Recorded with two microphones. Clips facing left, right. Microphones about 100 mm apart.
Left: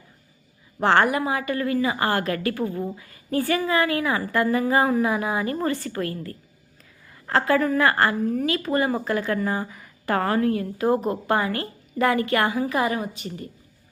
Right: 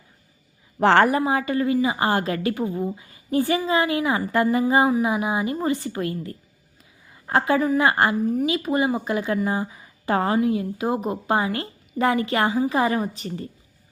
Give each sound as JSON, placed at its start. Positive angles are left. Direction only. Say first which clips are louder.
{"t": 0.8, "sound": "a woman's voice", "louder": "right 2 dB", "side_deg": -50}
{"t": 1.1, "sound": "a woman's voice", "louder": "right 3 dB", "side_deg": -30}